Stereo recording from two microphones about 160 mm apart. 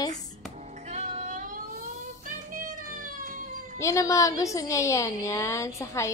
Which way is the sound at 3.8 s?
20° left (ahead or behind).